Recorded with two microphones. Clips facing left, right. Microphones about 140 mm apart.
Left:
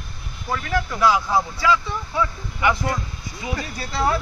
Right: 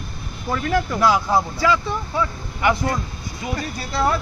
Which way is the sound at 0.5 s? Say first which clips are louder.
Right 3 dB; 35° right (ahead or behind).